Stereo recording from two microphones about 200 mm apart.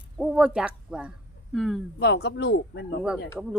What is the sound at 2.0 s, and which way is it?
Speech, 55° left (ahead or behind).